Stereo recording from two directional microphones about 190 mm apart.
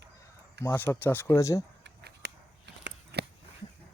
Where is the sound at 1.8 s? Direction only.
65° right (ahead or behind).